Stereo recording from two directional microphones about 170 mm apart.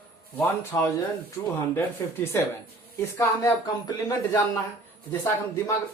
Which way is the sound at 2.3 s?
15° left (ahead or behind).